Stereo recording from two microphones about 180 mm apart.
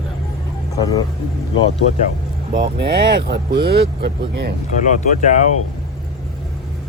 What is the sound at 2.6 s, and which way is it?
Speech, 60° right (ahead or behind).